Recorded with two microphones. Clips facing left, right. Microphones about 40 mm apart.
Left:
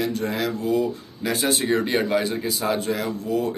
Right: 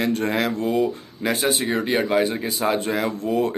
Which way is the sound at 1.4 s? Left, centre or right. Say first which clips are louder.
Left 2 dB; centre.